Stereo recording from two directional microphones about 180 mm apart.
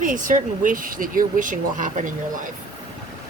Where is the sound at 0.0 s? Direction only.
45° right (ahead or behind).